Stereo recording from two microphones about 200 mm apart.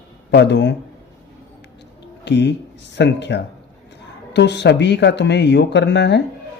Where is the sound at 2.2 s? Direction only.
60° left (ahead or behind).